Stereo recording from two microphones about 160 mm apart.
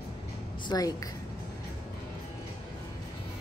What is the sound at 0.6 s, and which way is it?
Speech, 25° left (ahead or behind).